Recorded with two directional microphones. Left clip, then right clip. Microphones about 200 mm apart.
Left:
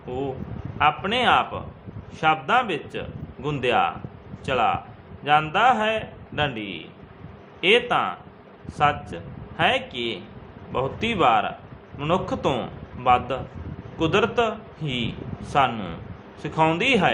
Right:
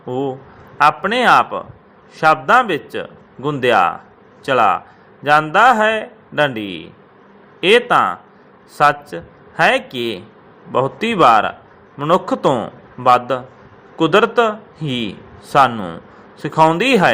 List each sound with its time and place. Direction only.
0.8 s a man's voice: 30° right (ahead or behind)
7.6 s a man's voice: 30° right (ahead or behind)